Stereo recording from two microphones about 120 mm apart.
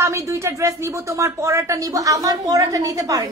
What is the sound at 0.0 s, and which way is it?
Speech, 25° right (ahead or behind).